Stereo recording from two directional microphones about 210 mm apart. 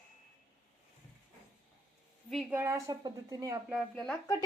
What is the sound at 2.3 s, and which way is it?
A woman's voice, 5° right (ahead or behind).